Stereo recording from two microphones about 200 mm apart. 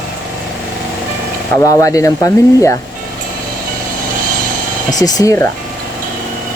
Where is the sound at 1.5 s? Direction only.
15° left (ahead or behind).